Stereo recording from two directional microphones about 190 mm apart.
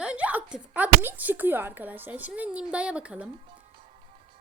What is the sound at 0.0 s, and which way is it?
Speech, 5° right (ahead or behind).